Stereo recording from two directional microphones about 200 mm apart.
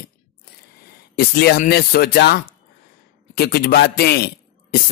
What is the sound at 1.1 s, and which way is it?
A man's voice, 55° left (ahead or behind).